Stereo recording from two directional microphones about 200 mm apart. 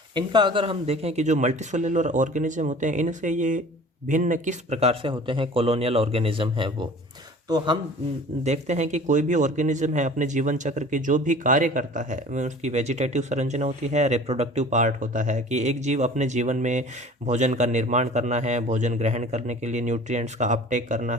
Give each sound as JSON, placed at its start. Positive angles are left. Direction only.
{"t": 0.1, "sound": "a man's voice", "side_deg": -20}
{"t": 8.4, "sound": "a man's voice", "side_deg": -35}